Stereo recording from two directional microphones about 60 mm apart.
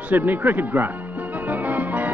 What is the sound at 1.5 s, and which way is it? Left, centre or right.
Music, right.